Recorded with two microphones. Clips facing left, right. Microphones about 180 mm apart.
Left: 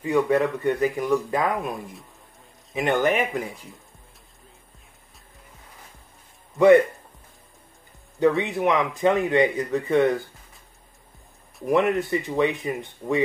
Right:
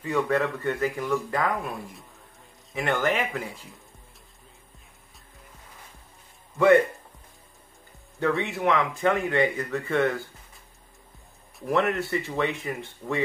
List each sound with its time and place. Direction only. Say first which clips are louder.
0.0 s speech: left 4 dB; 15° left (ahead or behind)
8.2 s speech: left 5 dB; 15° left (ahead or behind)
11.6 s speech: left 4 dB; 15° left (ahead or behind)